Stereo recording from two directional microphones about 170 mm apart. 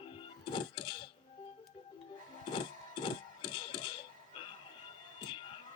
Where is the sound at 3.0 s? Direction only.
30° left (ahead or behind).